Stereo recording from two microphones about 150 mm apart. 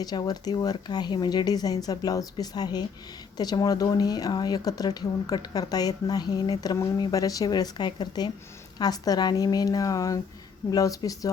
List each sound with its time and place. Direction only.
0.0 s speech: 25° left (ahead or behind)